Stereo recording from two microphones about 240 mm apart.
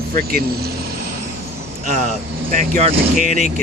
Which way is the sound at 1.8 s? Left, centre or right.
Right.